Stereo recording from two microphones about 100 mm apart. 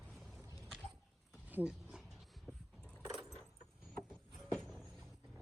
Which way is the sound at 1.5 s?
10° right (ahead or behind).